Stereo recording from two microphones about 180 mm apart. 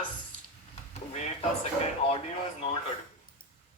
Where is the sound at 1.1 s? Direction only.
35° left (ahead or behind).